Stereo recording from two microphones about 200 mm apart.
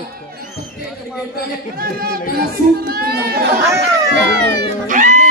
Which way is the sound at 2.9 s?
50° right (ahead or behind).